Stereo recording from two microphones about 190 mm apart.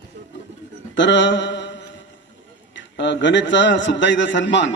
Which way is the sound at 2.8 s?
70° left (ahead or behind).